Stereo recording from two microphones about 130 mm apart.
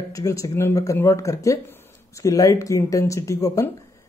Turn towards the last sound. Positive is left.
turn(degrees=25)  # may be behind; listen again after turning